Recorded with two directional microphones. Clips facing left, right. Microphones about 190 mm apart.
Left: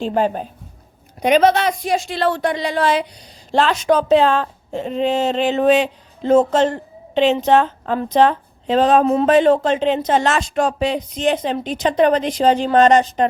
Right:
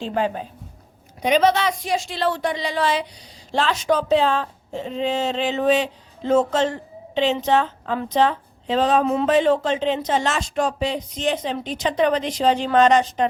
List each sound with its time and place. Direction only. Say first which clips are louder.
0.0 s a woman's voice: left 4 dB; 40° left (ahead or behind)
1.2 s speech: left 4 dB; 55° left (ahead or behind)
9.0 s a woman's voice: left 4 dB; 40° left (ahead or behind)
9.3 s speech: left 4 dB; 55° left (ahead or behind)